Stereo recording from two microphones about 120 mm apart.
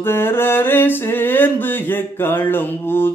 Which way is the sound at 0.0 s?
20° left (ahead or behind).